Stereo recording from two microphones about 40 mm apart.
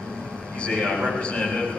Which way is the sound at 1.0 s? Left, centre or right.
Left.